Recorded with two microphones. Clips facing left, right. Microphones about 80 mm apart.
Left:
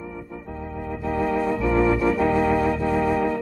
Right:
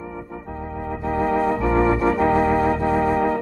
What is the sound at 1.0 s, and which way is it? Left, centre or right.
Organ, right.